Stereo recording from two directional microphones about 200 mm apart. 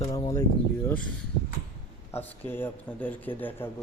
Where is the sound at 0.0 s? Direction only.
15° left (ahead or behind).